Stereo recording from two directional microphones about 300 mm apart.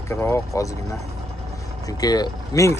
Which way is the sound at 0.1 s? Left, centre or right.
Centre.